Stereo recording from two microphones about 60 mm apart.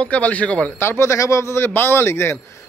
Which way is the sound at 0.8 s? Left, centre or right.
Left.